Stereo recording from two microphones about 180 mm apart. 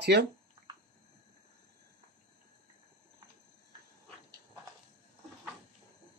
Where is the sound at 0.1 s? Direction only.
70° right (ahead or behind).